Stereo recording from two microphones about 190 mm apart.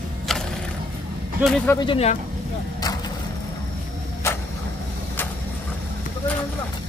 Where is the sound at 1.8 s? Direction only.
30° left (ahead or behind).